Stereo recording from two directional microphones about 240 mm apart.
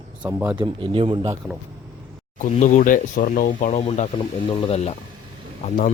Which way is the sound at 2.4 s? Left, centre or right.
Left.